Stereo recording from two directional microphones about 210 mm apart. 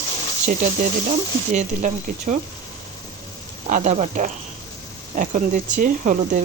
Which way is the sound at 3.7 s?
35° right (ahead or behind).